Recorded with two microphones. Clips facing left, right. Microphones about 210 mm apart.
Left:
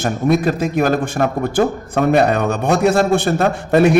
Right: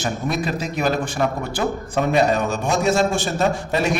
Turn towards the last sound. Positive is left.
turn(degrees=55)  # may be behind; listen again after turning